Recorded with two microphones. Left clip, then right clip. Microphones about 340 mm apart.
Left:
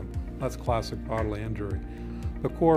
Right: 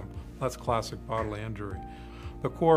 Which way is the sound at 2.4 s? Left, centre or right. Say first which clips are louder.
Left 2 dB; left.